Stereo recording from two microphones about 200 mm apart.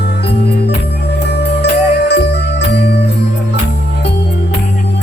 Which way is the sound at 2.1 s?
60° left (ahead or behind).